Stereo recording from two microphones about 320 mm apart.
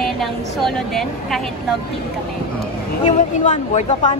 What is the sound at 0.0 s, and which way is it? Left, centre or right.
A woman's voice, centre.